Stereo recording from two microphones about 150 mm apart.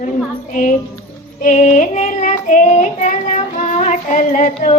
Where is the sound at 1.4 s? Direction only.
55° left (ahead or behind).